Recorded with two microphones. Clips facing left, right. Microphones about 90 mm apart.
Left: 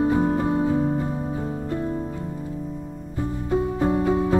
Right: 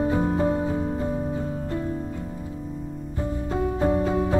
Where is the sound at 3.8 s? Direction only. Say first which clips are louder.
Right 2 dB; 20° left (ahead or behind).